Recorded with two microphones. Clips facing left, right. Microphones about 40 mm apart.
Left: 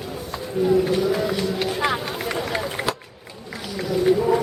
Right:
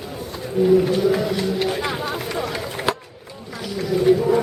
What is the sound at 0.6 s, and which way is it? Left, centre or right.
Speech, centre.